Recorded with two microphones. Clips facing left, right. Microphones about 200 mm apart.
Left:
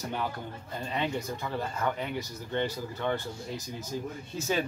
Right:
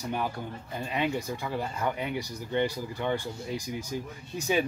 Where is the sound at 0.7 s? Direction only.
10° right (ahead or behind).